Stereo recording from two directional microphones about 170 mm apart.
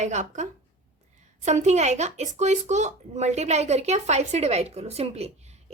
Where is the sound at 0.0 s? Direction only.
45° right (ahead or behind).